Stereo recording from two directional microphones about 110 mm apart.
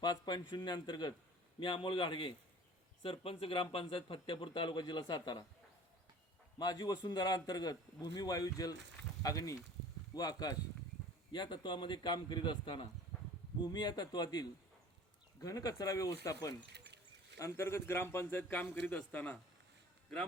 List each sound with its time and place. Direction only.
0.0 s a man's voice: 40° left (ahead or behind)
6.6 s a man's voice: 40° left (ahead or behind); by 19.4 s 10° left (ahead or behind)